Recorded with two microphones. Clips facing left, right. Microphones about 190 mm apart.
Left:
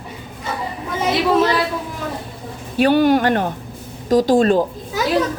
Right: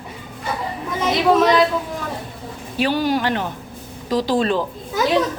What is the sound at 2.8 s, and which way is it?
Speech, 55° left (ahead or behind).